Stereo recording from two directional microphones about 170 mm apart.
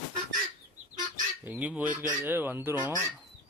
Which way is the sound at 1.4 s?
10° right (ahead or behind).